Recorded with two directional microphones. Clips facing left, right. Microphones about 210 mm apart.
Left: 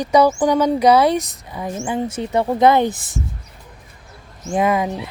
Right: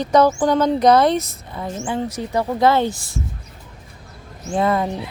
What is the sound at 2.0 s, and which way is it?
Speech, 25° left (ahead or behind).